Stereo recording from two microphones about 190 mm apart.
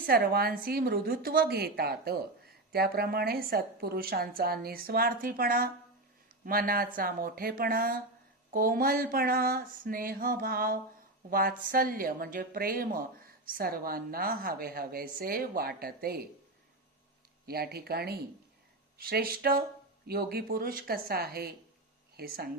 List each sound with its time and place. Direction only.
0.0 s a woman's voice: 50° right (ahead or behind)
17.4 s a woman's voice: 55° right (ahead or behind)